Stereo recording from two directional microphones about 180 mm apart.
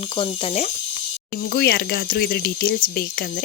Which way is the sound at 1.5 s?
60° left (ahead or behind).